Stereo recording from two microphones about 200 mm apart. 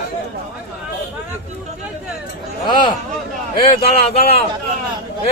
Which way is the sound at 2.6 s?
20° left (ahead or behind).